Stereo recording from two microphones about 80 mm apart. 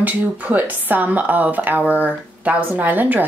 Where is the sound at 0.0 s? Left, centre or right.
Right.